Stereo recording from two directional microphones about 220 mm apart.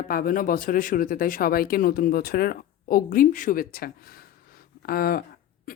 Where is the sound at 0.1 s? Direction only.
40° left (ahead or behind).